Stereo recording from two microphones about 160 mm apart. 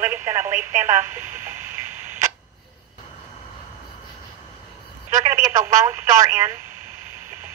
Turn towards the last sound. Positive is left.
turn(degrees=-15)  # may be behind; listen again after turning